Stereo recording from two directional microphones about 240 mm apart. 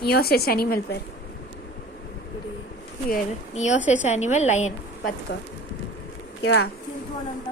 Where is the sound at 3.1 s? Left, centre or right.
Left.